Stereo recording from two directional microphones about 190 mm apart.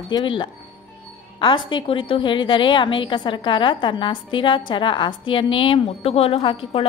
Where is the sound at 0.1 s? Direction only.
25° left (ahead or behind).